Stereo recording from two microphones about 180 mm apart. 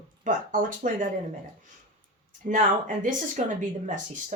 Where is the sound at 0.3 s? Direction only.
45° right (ahead or behind).